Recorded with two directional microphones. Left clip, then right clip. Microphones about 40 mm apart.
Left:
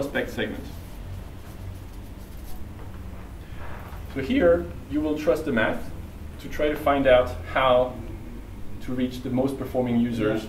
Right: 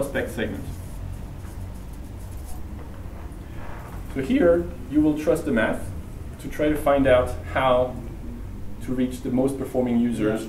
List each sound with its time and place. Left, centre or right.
0.1 s speech: centre
4.3 s speech: centre
5.1 s speech: right
5.4 s speech: centre
8.9 s speech: centre